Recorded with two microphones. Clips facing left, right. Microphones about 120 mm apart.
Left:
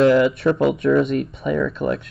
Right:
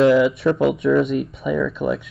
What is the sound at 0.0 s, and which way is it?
Speech, centre (ahead or behind).